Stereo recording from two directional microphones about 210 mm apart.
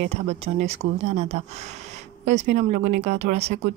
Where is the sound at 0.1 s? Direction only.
30° right (ahead or behind).